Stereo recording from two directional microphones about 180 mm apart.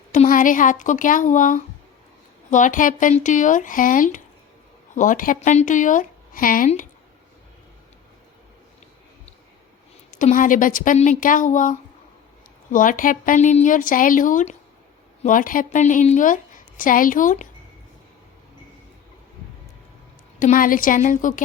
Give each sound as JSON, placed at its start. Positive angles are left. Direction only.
{"t": 0.1, "sound": "a woman's voice", "side_deg": 45}
{"t": 10.1, "sound": "a woman's voice", "side_deg": 45}
{"t": 20.4, "sound": "a woman's voice", "side_deg": 50}